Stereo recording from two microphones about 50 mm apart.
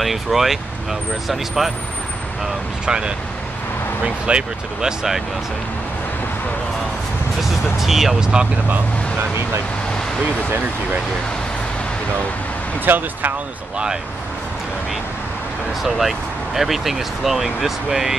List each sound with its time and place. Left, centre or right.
0.0 s speech: centre
2.8 s speech: centre
7.3 s speech: centre
12.8 s speech: right
15.8 s speech: centre